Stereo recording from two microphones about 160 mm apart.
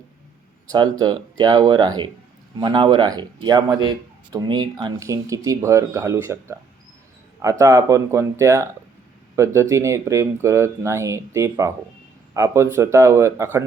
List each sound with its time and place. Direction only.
0.7 s speech: 25° right (ahead or behind)
7.6 s speech: 20° right (ahead or behind)